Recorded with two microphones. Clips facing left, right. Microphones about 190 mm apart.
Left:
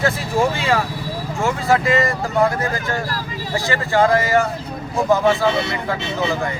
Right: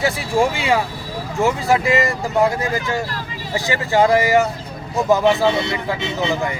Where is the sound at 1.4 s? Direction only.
15° right (ahead or behind).